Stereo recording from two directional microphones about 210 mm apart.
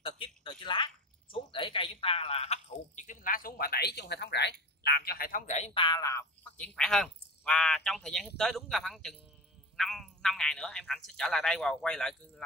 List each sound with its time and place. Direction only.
0.0 s speech: 25° left (ahead or behind); by 12.4 s 5° left (ahead or behind)